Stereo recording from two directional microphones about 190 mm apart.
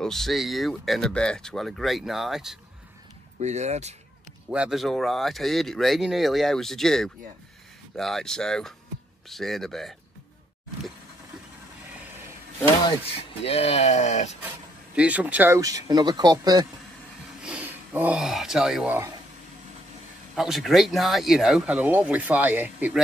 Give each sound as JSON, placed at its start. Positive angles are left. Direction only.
{"t": 0.0, "sound": "speech", "side_deg": 0}
{"t": 3.3, "sound": "speech", "side_deg": -35}
{"t": 4.5, "sound": "speech", "side_deg": -5}
{"t": 13.4, "sound": "speech", "side_deg": 30}
{"t": 15.0, "sound": "speech", "side_deg": -5}
{"t": 17.4, "sound": "speech", "side_deg": -5}
{"t": 20.3, "sound": "speech", "side_deg": 0}